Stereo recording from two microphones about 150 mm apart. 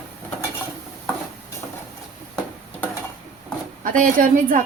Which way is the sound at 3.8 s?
60° right (ahead or behind).